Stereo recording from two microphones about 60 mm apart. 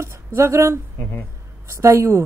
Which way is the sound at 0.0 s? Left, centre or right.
Right.